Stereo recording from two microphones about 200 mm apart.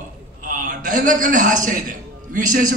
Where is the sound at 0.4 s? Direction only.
40° right (ahead or behind).